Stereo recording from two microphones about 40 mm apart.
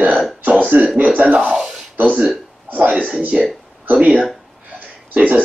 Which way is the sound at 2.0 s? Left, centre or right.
Right.